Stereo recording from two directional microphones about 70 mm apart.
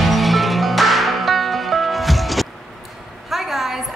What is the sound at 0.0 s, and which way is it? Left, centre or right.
Music, centre.